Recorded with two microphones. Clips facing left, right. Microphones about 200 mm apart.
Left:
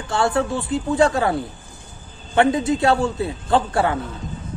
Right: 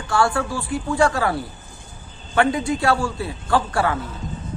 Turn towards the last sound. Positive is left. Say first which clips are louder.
# left 2 dB
turn(degrees=25)  # may be behind; listen again after turning